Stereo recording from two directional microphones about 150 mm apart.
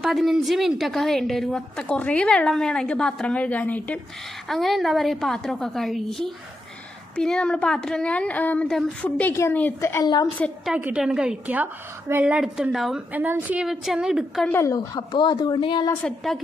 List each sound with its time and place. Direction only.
0.0 s a woman's voice: centre (ahead or behind); by 10.2 s 25° left (ahead or behind)
10.2 s a woman's voice: centre (ahead or behind)
14.5 s a woman's voice: 20° left (ahead or behind)
14.8 s speech: 30° left (ahead or behind)
15.9 s a woman's voice: 5° left (ahead or behind)